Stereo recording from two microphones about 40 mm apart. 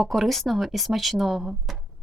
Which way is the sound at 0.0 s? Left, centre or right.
Centre.